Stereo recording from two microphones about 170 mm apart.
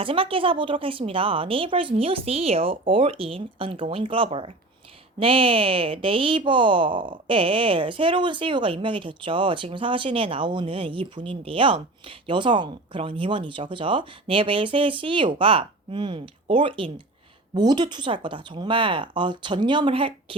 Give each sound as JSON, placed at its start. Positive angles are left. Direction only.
{"t": 0.0, "sound": "speech", "side_deg": -30}